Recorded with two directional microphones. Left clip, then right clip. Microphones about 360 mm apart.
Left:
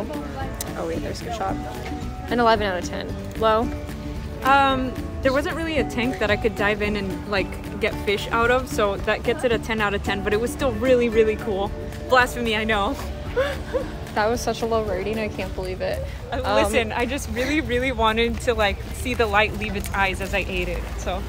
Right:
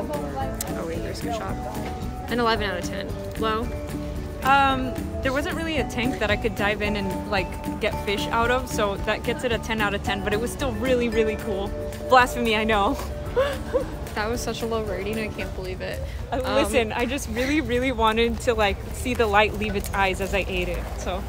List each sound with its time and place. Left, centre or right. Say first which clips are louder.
0.8 s music: left 1 dB; centre
2.2 s a woman's voice: left 4 dB; centre
12.1 s speech: right 1 dB; centre
14.1 s a woman's voice: left 6 dB; centre